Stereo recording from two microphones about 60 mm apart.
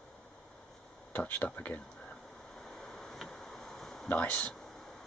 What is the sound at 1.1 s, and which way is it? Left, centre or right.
Speech, left.